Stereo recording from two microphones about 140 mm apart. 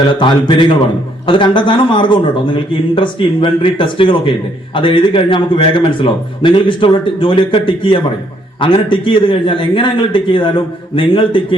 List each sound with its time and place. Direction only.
0.1 s a man's voice: 35° left (ahead or behind)